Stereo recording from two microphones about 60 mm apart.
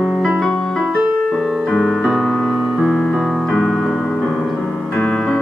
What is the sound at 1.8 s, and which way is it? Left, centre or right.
Music, centre.